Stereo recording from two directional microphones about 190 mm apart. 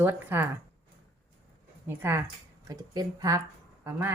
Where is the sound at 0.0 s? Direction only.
10° right (ahead or behind).